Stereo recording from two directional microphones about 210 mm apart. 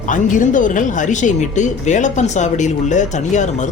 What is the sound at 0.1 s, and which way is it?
Speech, 40° left (ahead or behind).